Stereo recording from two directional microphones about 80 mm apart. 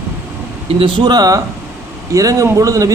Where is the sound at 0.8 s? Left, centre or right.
Right.